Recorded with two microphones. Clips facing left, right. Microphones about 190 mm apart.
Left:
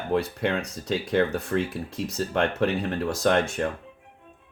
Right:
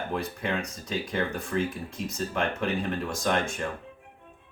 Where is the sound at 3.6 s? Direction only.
65° left (ahead or behind).